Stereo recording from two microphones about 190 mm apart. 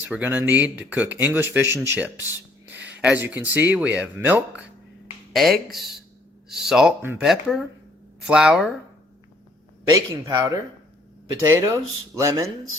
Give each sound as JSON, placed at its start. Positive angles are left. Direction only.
{"t": 0.0, "sound": "speech", "side_deg": -10}
{"t": 9.8, "sound": "speech", "side_deg": -20}